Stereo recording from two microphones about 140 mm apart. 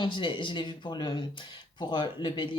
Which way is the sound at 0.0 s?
35° left (ahead or behind).